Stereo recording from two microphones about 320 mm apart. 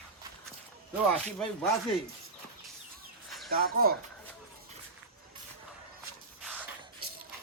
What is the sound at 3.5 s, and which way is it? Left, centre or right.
Speech, right.